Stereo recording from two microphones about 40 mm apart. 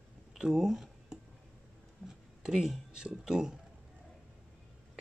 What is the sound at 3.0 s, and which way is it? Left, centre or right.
Speech, centre.